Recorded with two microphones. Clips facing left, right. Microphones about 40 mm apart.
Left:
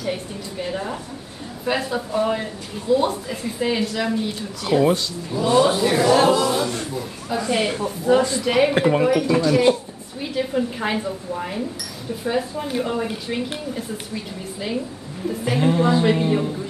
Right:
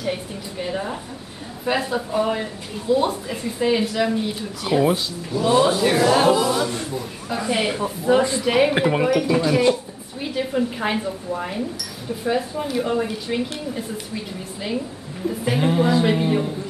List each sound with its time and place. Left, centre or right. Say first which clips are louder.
0.0 s a woman's voice: even; centre
8.5 s a woman's voice: left 1 dB; centre